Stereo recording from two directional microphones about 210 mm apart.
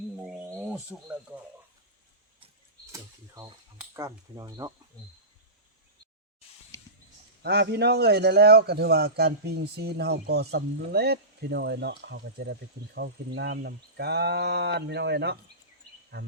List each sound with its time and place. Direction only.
0.2 s wild animals: 10° right (ahead or behind)
2.9 s speech: 15° right (ahead or behind)
7.4 s a man's voice: 50° right (ahead or behind)